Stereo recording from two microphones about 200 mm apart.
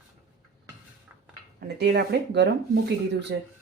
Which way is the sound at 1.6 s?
55° right (ahead or behind).